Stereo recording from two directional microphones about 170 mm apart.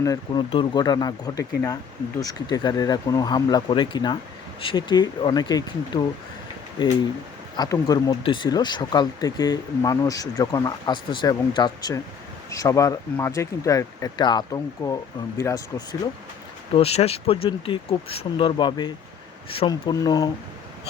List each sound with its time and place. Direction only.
0.0 s speech: 20° left (ahead or behind)
16.7 s speech: 35° left (ahead or behind); by 20.3 s 20° left (ahead or behind)